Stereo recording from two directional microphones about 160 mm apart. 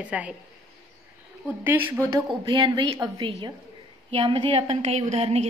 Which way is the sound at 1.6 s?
10° right (ahead or behind).